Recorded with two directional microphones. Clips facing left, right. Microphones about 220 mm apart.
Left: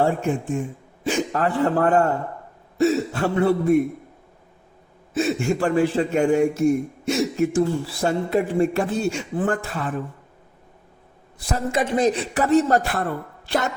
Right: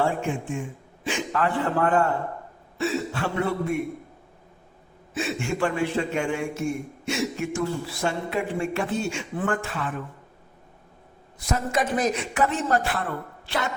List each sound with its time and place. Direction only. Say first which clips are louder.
0.0 s speech: left 4 dB; 40° left (ahead or behind)
5.1 s speech: left 6 dB; 40° left (ahead or behind)
11.3 s speech: left 2 dB; 30° left (ahead or behind)